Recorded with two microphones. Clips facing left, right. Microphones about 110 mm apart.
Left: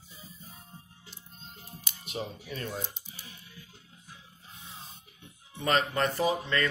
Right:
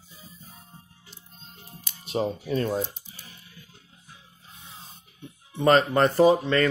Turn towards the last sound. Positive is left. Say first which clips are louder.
# right 10 dB
turn(degrees=-40)  # may be behind; listen again after turning